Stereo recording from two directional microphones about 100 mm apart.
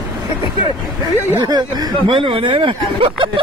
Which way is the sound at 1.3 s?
40° right (ahead or behind).